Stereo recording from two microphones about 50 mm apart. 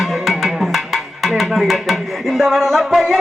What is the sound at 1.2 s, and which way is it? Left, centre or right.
Speech, centre.